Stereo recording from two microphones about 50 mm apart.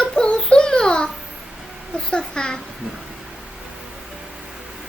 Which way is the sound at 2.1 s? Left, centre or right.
Centre.